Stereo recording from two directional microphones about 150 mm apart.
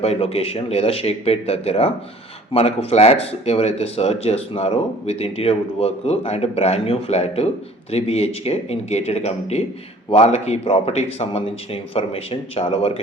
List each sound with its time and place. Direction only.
0.0 s speech: 45° left (ahead or behind)